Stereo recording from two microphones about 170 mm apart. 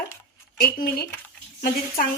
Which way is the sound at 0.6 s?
65° left (ahead or behind).